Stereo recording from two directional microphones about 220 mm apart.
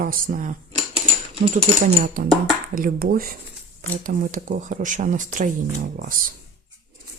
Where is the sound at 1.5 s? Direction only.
35° right (ahead or behind).